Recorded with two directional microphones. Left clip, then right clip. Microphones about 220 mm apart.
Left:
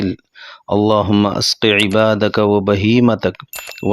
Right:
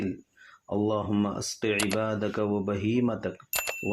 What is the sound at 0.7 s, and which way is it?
Speech, 45° left (ahead or behind).